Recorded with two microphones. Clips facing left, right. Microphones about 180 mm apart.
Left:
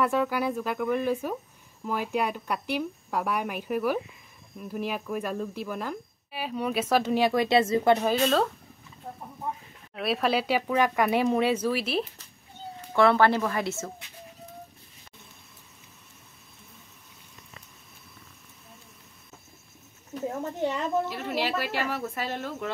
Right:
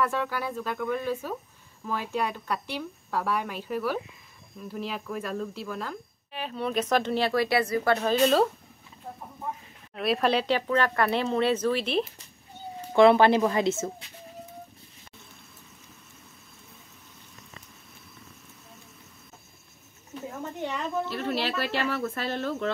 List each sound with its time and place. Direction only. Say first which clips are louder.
0.0 s speech: left 3 dB; 15° left (ahead or behind)
8.2 s speech: right 2 dB; 5° right (ahead or behind)
9.9 s speech: right 1 dB; centre (ahead or behind)
12.9 s speech: right 3 dB; 20° right (ahead or behind)
21.1 s speech: even; 10° left (ahead or behind)